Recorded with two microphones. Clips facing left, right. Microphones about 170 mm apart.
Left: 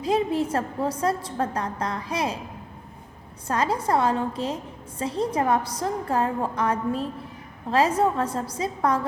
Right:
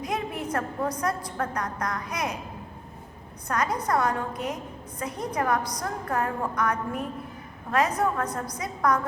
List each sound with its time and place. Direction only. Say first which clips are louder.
0.0 s a woman's voice: left 7 dB; 30° left (ahead or behind)
3.4 s a woman's voice: left 3 dB; 30° left (ahead or behind)